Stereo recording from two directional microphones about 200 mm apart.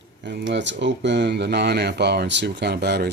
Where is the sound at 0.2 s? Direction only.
60° right (ahead or behind).